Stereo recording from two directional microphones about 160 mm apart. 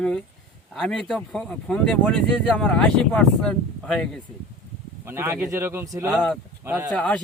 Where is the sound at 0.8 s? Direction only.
5° left (ahead or behind).